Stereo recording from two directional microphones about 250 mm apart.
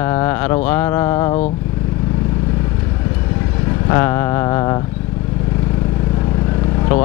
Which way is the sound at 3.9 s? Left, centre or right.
Centre.